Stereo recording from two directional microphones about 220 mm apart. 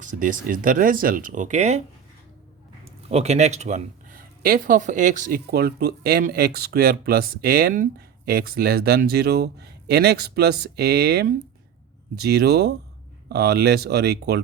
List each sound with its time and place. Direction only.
0.0 s speech: 35° right (ahead or behind)
3.1 s speech: 30° right (ahead or behind); by 14.4 s 50° right (ahead or behind)